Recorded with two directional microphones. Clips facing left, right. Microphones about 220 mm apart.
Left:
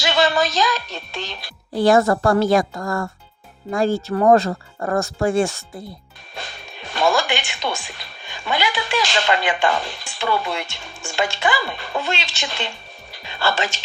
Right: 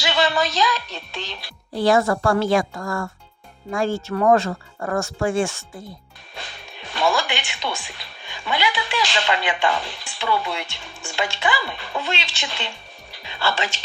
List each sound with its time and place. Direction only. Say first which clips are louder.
0.0 s speech: left 2 dB; 45° left (ahead or behind)